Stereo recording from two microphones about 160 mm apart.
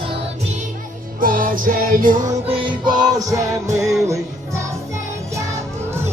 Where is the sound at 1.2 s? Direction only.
60° right (ahead or behind).